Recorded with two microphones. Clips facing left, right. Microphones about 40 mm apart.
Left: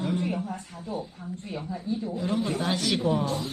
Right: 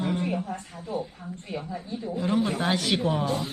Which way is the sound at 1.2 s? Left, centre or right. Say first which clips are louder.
Left 1 dB; right.